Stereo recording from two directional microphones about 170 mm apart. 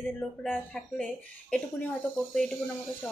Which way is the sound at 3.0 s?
10° left (ahead or behind).